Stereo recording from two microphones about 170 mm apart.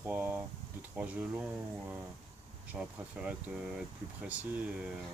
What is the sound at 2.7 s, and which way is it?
Speech, 5° right (ahead or behind).